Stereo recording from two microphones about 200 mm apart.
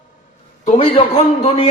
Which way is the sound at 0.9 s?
25° left (ahead or behind).